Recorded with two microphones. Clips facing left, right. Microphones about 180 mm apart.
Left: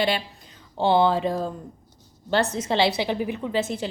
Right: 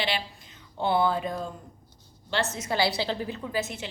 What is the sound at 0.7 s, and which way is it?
A woman's voice, 30° left (ahead or behind).